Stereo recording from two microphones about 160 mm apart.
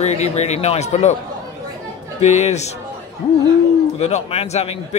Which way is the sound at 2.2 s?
45° left (ahead or behind).